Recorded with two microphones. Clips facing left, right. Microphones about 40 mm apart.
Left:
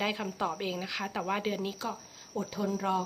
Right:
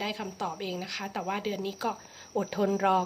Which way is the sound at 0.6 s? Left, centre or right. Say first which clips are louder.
Left 1 dB; centre.